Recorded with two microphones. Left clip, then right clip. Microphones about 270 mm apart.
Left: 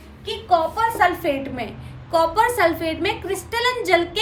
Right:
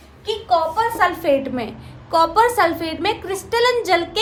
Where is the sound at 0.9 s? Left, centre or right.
Centre.